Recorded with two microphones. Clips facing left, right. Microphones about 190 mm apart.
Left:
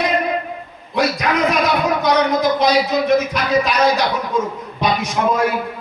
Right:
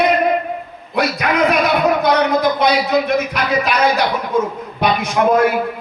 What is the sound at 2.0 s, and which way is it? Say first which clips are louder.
A man's voice: right 1 dB; 60° right (ahead or behind).